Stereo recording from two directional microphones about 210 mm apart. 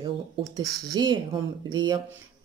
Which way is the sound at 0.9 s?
20° right (ahead or behind).